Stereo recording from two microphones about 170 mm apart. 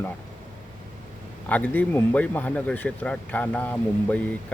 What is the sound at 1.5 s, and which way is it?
Speech, 10° left (ahead or behind).